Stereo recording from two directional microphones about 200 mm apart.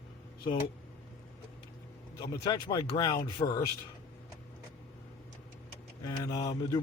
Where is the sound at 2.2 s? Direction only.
20° left (ahead or behind).